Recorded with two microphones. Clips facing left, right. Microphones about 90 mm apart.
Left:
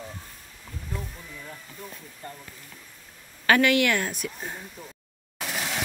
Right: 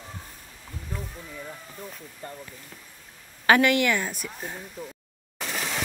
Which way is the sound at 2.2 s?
30° right (ahead or behind).